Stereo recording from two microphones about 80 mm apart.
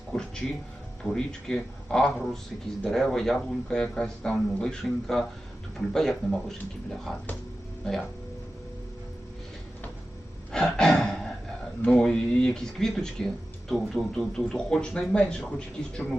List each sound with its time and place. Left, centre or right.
0.1 s a man's voice: centre
10.5 s a sound: centre
11.9 s speech: centre